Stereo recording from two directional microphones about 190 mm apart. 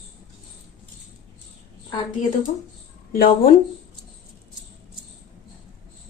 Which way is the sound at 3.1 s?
50° left (ahead or behind).